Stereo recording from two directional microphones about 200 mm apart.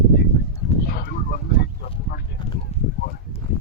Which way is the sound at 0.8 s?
50° left (ahead or behind).